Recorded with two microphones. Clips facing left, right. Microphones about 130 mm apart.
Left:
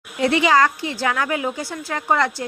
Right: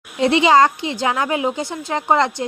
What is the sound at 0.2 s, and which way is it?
Speech, 25° right (ahead or behind).